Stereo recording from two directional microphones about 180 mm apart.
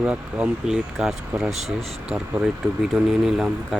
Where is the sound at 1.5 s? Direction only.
35° right (ahead or behind).